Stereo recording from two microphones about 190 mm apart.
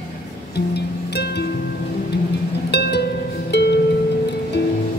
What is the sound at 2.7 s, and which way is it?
Music, 60° left (ahead or behind).